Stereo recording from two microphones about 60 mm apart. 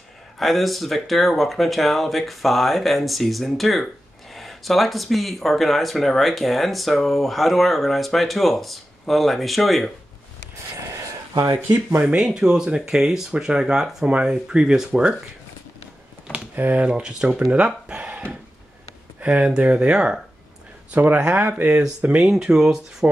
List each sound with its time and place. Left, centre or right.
0.4 s speech: centre
12.2 s speech: centre
16.5 s speech: right; by 17.5 s centre
17.5 s a sound: centre
19.1 s speech: right
20.9 s speech: right; by 23.1 s centre